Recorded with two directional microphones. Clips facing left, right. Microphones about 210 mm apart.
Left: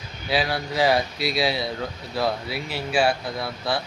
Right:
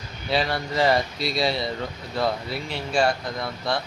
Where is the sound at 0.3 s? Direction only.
5° left (ahead or behind).